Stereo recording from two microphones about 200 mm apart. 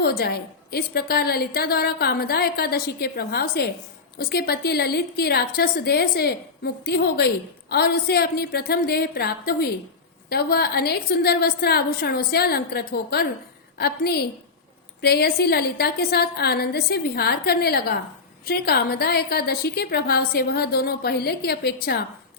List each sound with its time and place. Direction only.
0.0 s a woman's voice: 50° left (ahead or behind)